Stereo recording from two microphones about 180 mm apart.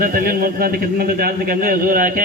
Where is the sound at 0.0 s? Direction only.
50° right (ahead or behind).